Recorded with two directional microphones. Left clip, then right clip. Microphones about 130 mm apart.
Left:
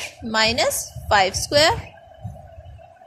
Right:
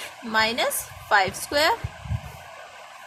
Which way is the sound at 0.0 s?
25° left (ahead or behind).